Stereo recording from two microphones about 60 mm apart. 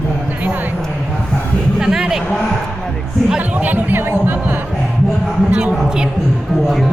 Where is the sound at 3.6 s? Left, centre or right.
Right.